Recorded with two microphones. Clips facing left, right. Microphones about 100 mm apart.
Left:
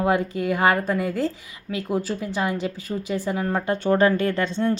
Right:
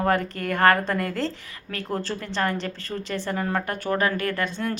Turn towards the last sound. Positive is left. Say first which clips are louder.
# left 4 dB
turn(degrees=25)  # may be behind; listen again after turning